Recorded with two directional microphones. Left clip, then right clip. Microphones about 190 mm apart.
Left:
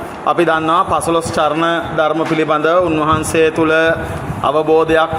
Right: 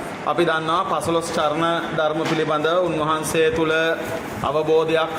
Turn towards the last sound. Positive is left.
turn(degrees=30)  # may be behind; listen again after turning